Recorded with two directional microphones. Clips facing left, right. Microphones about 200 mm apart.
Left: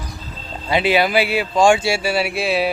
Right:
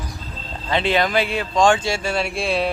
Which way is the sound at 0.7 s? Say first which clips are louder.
Left 3 dB; 10° left (ahead or behind).